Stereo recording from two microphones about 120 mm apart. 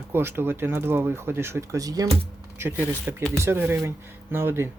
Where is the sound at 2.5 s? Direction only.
15° right (ahead or behind).